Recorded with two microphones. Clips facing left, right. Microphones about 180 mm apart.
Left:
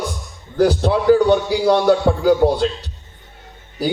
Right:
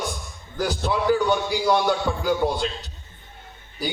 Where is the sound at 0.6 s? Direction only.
35° left (ahead or behind).